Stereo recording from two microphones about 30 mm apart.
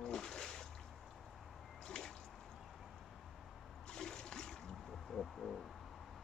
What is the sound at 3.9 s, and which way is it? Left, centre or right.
Water, left.